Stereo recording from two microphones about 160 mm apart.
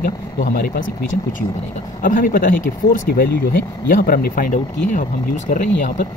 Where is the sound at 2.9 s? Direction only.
75° left (ahead or behind); by 6.0 s 55° left (ahead or behind).